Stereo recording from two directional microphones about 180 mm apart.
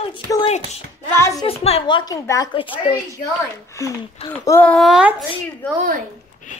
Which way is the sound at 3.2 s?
15° left (ahead or behind).